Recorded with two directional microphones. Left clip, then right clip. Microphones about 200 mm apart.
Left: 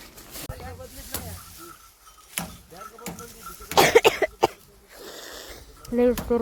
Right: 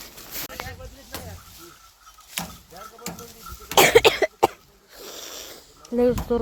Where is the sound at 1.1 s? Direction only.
60° left (ahead or behind).